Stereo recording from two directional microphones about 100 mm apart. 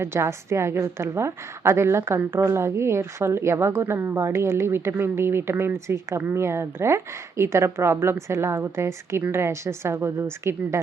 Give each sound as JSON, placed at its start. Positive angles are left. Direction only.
{"t": 0.0, "sound": "a woman's voice", "side_deg": -25}